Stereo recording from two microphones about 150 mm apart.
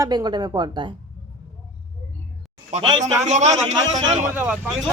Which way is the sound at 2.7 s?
45° right (ahead or behind).